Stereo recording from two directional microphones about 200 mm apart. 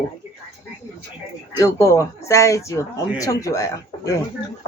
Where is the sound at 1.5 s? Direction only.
15° left (ahead or behind).